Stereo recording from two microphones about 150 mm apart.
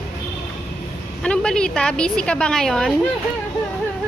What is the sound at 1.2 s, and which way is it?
A woman's voice, 5° left (ahead or behind).